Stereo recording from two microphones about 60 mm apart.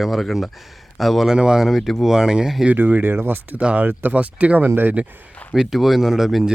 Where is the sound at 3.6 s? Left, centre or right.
Centre.